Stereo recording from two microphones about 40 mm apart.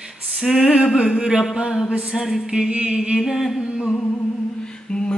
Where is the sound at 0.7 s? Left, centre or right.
Centre.